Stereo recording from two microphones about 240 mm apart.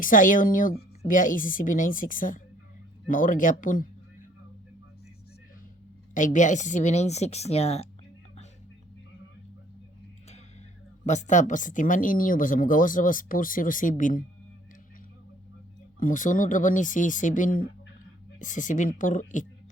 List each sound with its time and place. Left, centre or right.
0.0 s speech: left
6.1 s a woman's voice: left
11.0 s speech: left
16.0 s speech: left